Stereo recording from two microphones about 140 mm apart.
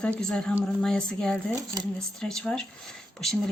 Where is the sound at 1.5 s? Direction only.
25° right (ahead or behind).